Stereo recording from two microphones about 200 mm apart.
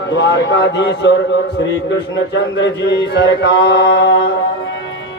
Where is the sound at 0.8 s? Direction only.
60° left (ahead or behind).